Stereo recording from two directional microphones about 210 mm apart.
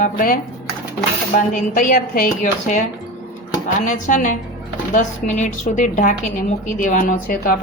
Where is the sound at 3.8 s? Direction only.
40° left (ahead or behind).